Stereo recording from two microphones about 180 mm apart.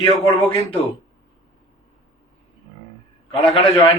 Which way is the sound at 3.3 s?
30° left (ahead or behind).